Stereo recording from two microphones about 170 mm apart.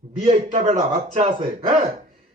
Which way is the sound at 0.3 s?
40° right (ahead or behind).